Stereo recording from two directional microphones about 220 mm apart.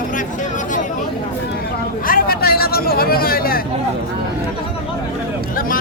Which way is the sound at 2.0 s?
40° left (ahead or behind).